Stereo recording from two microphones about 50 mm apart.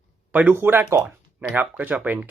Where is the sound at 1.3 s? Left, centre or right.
Right.